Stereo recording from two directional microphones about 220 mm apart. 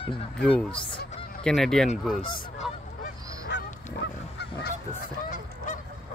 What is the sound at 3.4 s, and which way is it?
Goose, 50° left (ahead or behind).